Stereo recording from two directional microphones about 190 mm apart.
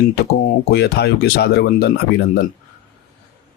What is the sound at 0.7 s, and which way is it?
Speech, 60° left (ahead or behind).